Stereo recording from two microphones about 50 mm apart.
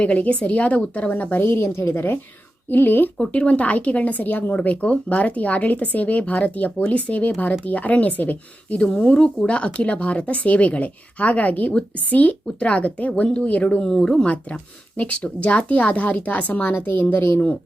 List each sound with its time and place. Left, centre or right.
0.0 s speech: left
2.6 s speech: left
3.2 s speech: left
8.8 s speech: left
14.3 s speech: left
16.7 s a woman's voice: left